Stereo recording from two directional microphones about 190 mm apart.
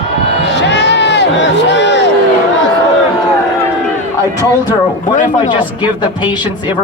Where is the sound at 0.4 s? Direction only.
65° left (ahead or behind).